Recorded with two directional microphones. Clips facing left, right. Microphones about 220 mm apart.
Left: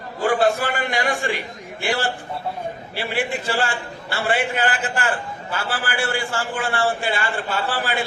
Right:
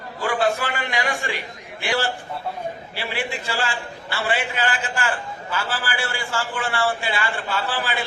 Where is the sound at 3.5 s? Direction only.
50° left (ahead or behind).